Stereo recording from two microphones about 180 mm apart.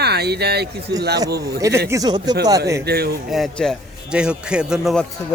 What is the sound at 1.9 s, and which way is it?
Speech, 20° right (ahead or behind).